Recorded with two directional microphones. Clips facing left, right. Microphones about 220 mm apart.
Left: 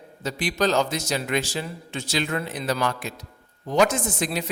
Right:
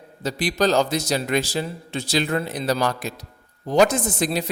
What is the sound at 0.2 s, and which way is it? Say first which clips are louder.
A man's voice: right 3 dB; 35° right (ahead or behind).